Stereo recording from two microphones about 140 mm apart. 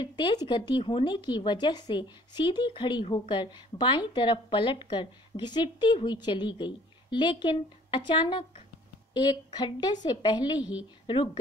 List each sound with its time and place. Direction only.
0.0 s a woman's voice: 30° left (ahead or behind)
10.6 s speech: 10° right (ahead or behind)
11.1 s a woman's voice: 30° left (ahead or behind)